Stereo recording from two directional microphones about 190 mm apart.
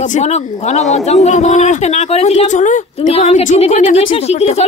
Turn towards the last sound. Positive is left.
turn(degrees=35)  # may be behind; listen again after turning